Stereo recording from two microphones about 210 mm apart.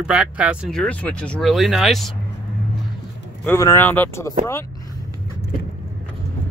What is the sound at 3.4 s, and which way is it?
Speech, 10° left (ahead or behind).